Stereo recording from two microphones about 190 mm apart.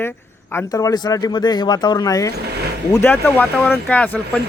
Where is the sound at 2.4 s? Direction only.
60° right (ahead or behind).